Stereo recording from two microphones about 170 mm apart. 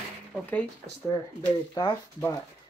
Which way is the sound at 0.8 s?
50° right (ahead or behind).